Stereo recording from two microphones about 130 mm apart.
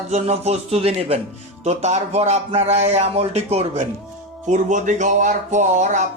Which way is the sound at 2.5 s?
55° right (ahead or behind).